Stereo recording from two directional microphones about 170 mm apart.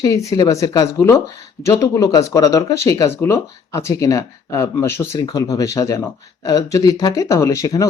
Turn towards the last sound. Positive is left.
turn(degrees=20)  # may be behind; listen again after turning